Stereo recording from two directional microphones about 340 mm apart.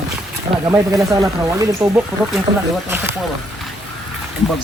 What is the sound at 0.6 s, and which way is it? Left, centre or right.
Speech, centre.